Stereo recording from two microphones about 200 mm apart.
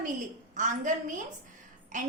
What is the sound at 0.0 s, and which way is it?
A woman's voice, 40° right (ahead or behind).